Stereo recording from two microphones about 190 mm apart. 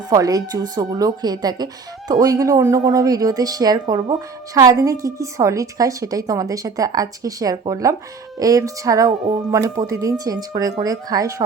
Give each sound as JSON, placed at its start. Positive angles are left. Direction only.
{"t": 0.1, "sound": "speech", "side_deg": -20}